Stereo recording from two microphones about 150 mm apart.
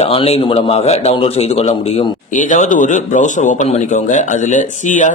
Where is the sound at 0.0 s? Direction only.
40° left (ahead or behind).